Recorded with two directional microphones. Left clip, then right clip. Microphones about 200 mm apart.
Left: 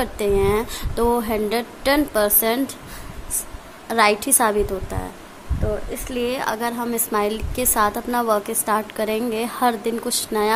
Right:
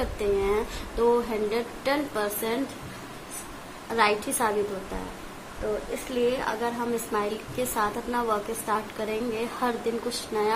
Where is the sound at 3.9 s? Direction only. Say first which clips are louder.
Left 6 dB; 60° left (ahead or behind).